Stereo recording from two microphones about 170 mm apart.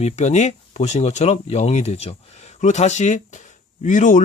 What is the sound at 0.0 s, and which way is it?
Speech, 45° left (ahead or behind).